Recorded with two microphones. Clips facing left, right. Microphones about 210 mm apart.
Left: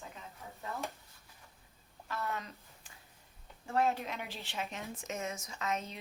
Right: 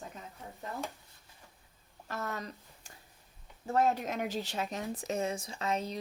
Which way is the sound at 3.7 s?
45° right (ahead or behind).